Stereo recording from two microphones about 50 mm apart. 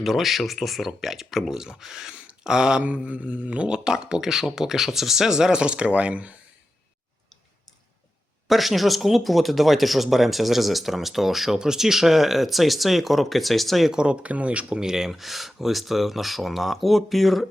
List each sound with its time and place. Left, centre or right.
0.0 s speech: centre
2.2 s a sound: centre
2.8 s speech: right
8.4 s speech: centre
13.9 s speech: centre
14.8 s speech: centre